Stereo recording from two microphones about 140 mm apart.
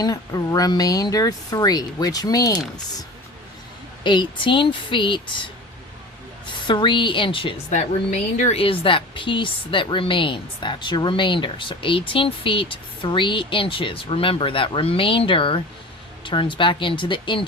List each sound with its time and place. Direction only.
0.0 s speech: 25° left (ahead or behind)
4.0 s a woman's voice: 35° left (ahead or behind)
6.7 s a woman's voice: 35° left (ahead or behind)
7.7 s a woman's voice: 60° left (ahead or behind)
8.6 s a woman's voice: 40° left (ahead or behind)